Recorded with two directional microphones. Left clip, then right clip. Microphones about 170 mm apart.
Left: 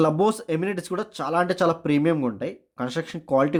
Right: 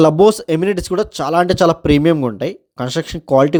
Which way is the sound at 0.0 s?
45° right (ahead or behind).